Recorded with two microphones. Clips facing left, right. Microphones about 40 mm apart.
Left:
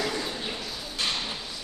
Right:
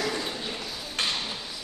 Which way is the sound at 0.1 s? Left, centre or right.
Centre.